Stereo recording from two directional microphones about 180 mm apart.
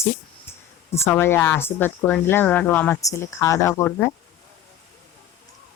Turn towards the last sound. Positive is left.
turn(degrees=15)  # may be behind; listen again after turning